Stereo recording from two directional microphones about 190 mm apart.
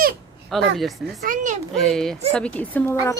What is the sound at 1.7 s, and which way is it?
Speech, centre (ahead or behind).